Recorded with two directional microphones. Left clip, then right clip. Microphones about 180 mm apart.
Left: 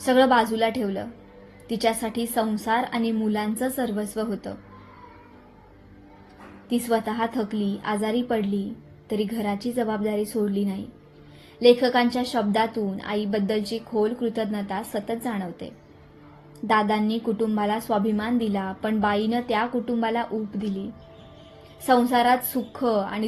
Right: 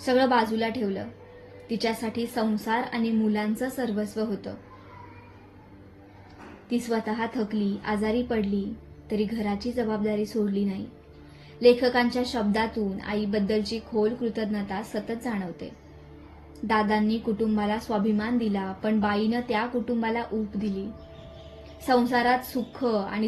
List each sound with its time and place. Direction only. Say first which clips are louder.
0.0 s a woman's voice: left 3 dB; 35° left (ahead or behind)
6.7 s a woman's voice: left 4 dB; 35° left (ahead or behind)
11.6 s a woman's voice: left 2 dB; 30° left (ahead or behind)
16.6 s a woman's voice: left 3 dB; 35° left (ahead or behind)
21.8 s a woman's voice: left 3 dB; 35° left (ahead or behind)